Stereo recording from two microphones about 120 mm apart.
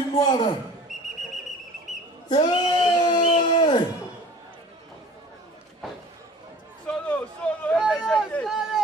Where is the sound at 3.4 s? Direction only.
40° left (ahead or behind).